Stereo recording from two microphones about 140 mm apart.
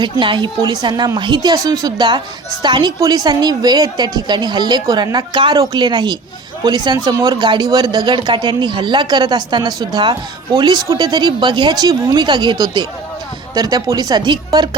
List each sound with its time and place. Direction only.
0.0 s speech: 35° right (ahead or behind)